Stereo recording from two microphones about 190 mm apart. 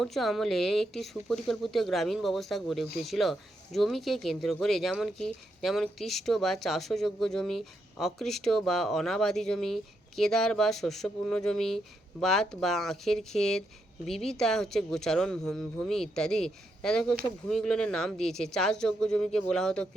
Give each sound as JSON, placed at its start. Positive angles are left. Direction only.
{"t": 0.0, "sound": "speech", "side_deg": 0}